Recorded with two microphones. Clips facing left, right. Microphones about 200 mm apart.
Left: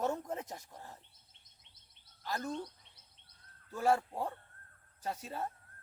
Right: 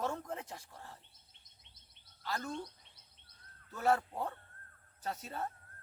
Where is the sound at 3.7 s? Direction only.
10° left (ahead or behind).